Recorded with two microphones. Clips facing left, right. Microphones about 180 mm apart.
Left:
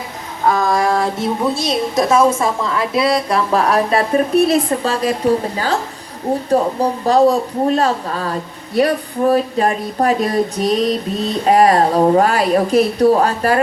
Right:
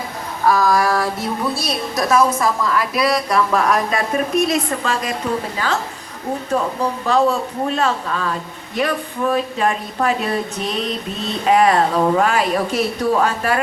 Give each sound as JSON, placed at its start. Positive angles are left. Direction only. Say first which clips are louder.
{"t": 0.4, "sound": "a woman's voice", "louder": "left 1 dB", "side_deg": 25}